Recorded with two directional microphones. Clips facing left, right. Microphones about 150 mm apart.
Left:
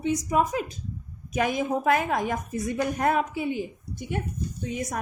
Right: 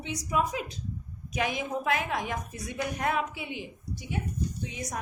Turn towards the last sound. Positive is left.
turn(degrees=55)  # may be behind; listen again after turning